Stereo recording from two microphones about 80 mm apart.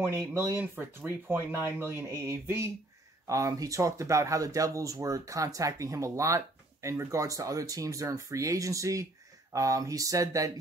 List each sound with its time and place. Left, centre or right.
0.0 s speech: right
0.6 s speech: right
3.3 s speech: right